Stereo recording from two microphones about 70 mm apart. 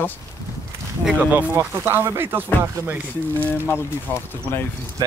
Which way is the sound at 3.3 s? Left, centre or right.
Left.